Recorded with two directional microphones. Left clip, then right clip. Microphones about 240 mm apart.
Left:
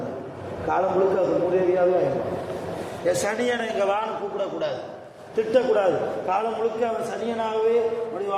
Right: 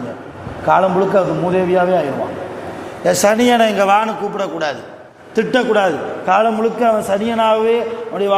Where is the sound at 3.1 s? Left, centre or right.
Right.